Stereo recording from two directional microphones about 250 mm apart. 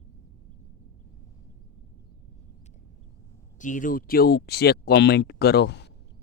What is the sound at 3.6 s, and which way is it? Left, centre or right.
Speech, left.